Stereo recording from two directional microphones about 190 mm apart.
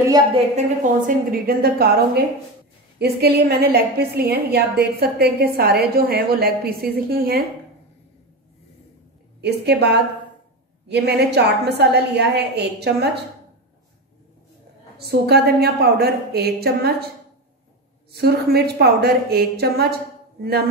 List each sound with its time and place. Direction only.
0.6 s a woman's voice: 50° right (ahead or behind)
9.4 s a woman's voice: 60° right (ahead or behind)
15.0 s a woman's voice: 55° right (ahead or behind)
18.1 s a woman's voice: 55° right (ahead or behind)